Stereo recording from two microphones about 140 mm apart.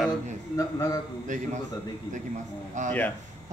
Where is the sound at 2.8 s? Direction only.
60° right (ahead or behind).